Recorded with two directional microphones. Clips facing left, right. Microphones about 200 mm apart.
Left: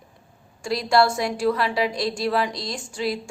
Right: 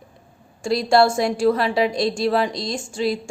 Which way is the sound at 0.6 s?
25° right (ahead or behind).